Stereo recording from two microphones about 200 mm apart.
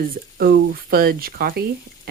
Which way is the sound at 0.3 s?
50° right (ahead or behind).